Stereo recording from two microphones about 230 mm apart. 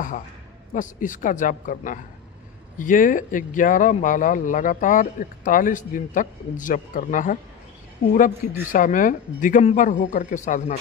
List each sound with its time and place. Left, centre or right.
0.7 s speech: left
8.4 s speech: left